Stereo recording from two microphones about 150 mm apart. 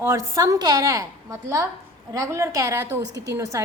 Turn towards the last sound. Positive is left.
turn(degrees=-20)  # may be behind; listen again after turning